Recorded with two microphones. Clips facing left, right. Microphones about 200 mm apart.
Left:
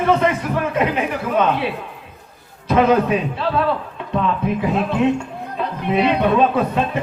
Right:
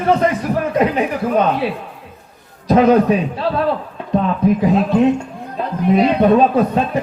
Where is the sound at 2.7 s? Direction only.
35° right (ahead or behind).